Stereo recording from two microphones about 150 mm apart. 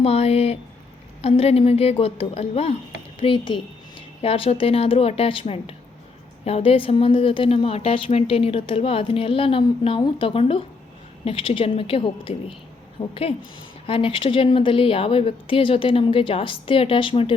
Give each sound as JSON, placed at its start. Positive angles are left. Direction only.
{"t": 0.0, "sound": "a woman's voice", "side_deg": 40}